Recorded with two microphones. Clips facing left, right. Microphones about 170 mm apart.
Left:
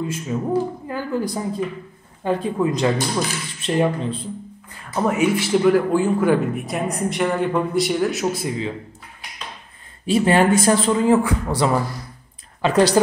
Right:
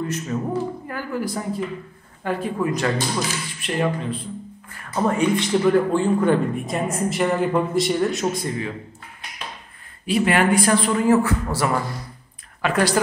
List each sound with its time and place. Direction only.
0.0 s speech: 10° left (ahead or behind)
0.5 s a man's voice: 20° left (ahead or behind)
4.6 s a man's voice: 10° left (ahead or behind)
10.0 s a man's voice: 30° left (ahead or behind); by 11.8 s 15° left (ahead or behind)
12.6 s a man's voice: 25° left (ahead or behind)